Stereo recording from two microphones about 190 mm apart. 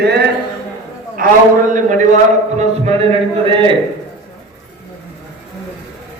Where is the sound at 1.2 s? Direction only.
50° right (ahead or behind).